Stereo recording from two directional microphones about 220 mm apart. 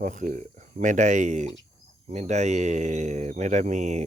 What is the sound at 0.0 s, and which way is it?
Speech, 35° right (ahead or behind).